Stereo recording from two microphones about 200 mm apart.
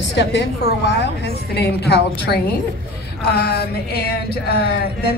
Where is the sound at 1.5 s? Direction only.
55° left (ahead or behind).